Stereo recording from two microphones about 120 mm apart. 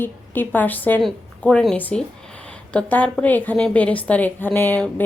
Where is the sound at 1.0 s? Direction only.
5° left (ahead or behind).